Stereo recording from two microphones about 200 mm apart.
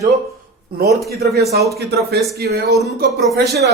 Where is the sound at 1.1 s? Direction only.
55° right (ahead or behind).